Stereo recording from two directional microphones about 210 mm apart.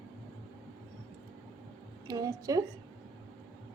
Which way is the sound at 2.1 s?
15° right (ahead or behind).